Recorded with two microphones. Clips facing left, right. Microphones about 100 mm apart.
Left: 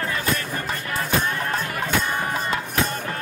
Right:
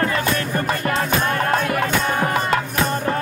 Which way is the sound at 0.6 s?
70° right (ahead or behind).